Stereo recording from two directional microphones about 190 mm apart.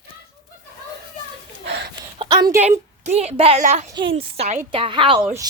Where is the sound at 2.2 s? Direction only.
20° right (ahead or behind).